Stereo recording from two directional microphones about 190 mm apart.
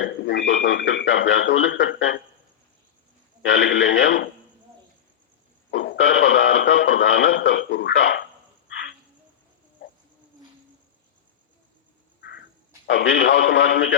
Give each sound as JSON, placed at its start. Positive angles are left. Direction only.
{"t": 0.0, "sound": "speech", "side_deg": 65}
{"t": 3.4, "sound": "speech", "side_deg": 75}
{"t": 5.7, "sound": "speech", "side_deg": 75}
{"t": 12.2, "sound": "a sound", "side_deg": 60}
{"t": 12.9, "sound": "speech", "side_deg": 70}